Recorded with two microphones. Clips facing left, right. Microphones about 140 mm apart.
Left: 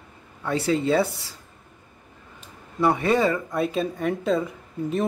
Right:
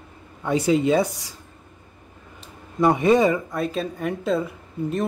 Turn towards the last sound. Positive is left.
turn(degrees=0)  # may be behind; listen again after turning